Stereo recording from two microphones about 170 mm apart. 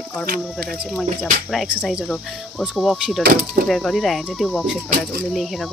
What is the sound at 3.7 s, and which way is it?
Speech, centre (ahead or behind).